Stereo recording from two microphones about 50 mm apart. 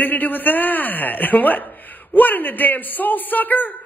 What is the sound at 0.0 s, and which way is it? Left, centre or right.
A man's voice, left.